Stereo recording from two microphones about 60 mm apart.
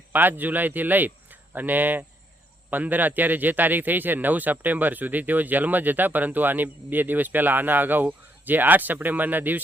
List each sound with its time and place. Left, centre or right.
0.1 s a man's voice: right